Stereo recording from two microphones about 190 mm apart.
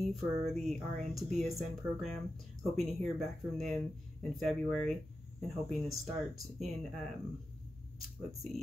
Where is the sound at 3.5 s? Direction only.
35° right (ahead or behind).